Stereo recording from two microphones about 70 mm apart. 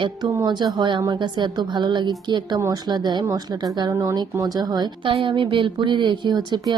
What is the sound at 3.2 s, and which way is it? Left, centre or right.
Speech, right.